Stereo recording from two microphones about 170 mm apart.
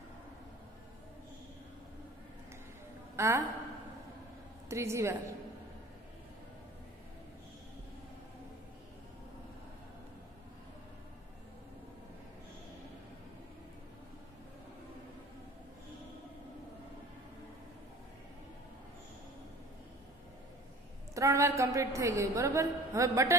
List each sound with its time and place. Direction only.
3.2 s a woman's voice: 15° right (ahead or behind)
4.6 s a woman's voice: 15° right (ahead or behind)
21.1 s a woman's voice: 15° right (ahead or behind)